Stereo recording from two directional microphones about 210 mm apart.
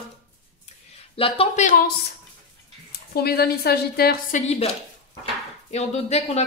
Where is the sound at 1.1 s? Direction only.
25° left (ahead or behind).